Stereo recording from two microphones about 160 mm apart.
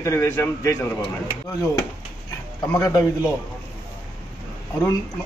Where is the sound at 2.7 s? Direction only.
25° left (ahead or behind).